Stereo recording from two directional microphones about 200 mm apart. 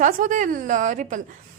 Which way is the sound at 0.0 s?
40° right (ahead or behind).